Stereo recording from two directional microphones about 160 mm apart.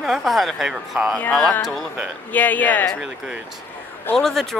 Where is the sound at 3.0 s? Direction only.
5° right (ahead or behind).